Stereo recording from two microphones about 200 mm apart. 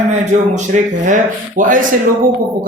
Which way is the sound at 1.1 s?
40° right (ahead or behind).